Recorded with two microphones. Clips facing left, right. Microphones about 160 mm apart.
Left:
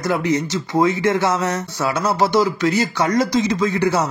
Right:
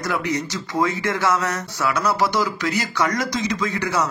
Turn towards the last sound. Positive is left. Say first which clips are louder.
# left 5 dB
turn(degrees=30)  # may be behind; listen again after turning